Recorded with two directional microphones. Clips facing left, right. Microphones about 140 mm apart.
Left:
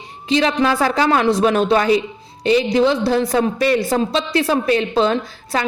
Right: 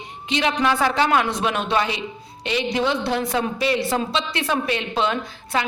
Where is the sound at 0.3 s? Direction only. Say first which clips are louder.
Left 5 dB; 35° left (ahead or behind).